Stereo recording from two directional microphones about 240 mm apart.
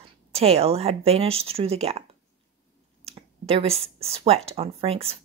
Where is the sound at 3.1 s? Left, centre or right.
Right.